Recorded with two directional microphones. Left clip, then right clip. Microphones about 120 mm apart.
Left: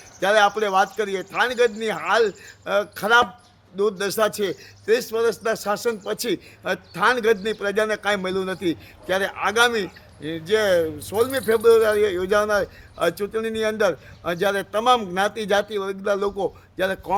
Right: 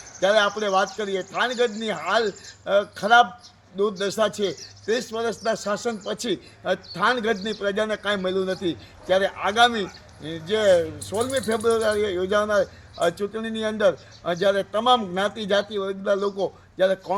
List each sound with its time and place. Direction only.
0.2 s a man's voice: 35° left (ahead or behind)